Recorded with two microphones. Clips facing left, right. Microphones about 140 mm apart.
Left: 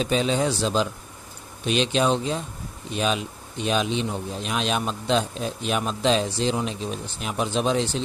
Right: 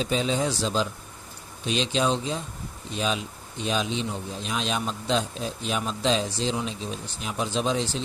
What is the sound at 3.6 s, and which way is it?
Speech, 65° left (ahead or behind).